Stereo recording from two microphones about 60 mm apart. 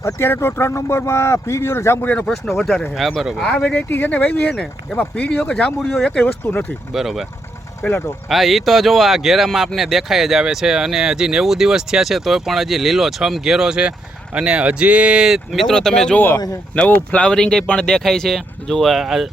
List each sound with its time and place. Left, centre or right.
0.0 s speech: left
2.2 s speech: centre
3.8 s speech: left
4.1 s speech: left
6.4 s speech: left
6.9 s speech: centre
7.8 s speech: centre
8.3 s speech: centre
15.6 s speech: centre
16.1 s speech: left
17.2 s speech: centre